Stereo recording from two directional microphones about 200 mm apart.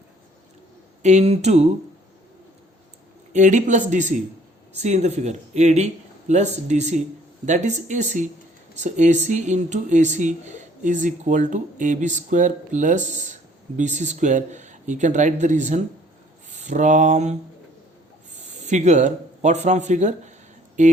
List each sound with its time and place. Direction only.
1.0 s speech: 35° right (ahead or behind)
3.3 s speech: 35° right (ahead or behind)
18.6 s speech: 35° right (ahead or behind)